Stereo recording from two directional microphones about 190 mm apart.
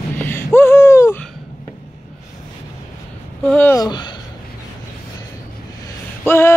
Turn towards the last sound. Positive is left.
turn(degrees=15)  # may be behind; listen again after turning